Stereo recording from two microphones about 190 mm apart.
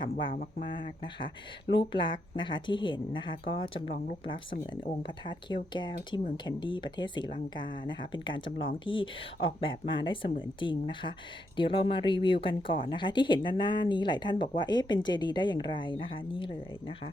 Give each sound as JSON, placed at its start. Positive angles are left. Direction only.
{"t": 0.3, "sound": "speech", "side_deg": 45}
{"t": 0.7, "sound": "speech", "side_deg": 25}